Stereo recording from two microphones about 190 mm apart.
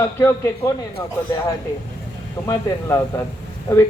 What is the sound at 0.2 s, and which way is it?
Speech, 15° left (ahead or behind).